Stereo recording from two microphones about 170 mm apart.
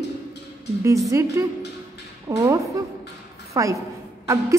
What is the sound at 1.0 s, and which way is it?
A woman's voice, 20° right (ahead or behind).